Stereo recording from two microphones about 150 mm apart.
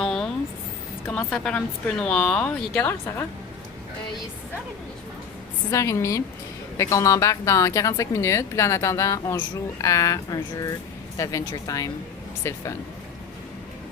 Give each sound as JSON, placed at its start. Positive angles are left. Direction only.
{"t": 0.0, "sound": "a sound", "side_deg": 5}
{"t": 1.0, "sound": "speech", "side_deg": 5}
{"t": 5.7, "sound": "speech", "side_deg": 20}